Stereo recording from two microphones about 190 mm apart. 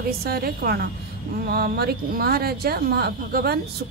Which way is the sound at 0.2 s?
55° right (ahead or behind).